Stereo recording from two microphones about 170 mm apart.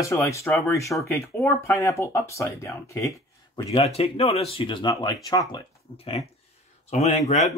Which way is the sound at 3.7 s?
35° left (ahead or behind).